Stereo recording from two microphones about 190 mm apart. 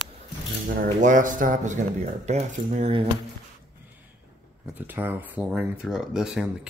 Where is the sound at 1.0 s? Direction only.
40° right (ahead or behind).